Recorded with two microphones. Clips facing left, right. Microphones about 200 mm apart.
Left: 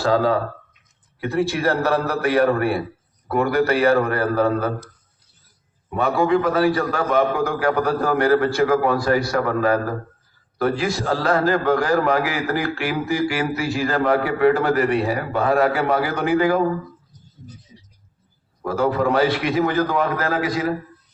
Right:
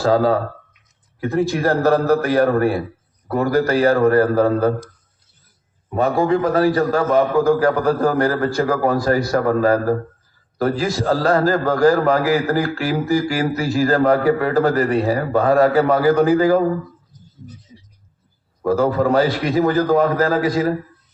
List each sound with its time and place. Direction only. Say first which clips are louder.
0.0 s a man's voice: right 3 dB; 40° right (ahead or behind)
5.9 s a man's voice: right 2 dB; 40° right (ahead or behind)
18.6 s a man's voice: right 3 dB; 40° right (ahead or behind)